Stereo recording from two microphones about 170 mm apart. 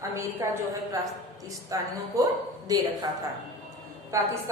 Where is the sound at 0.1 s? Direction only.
15° right (ahead or behind).